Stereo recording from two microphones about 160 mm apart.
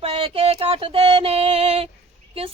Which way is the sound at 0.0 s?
35° right (ahead or behind).